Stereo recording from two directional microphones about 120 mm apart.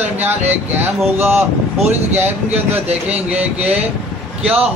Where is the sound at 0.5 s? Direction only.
15° right (ahead or behind).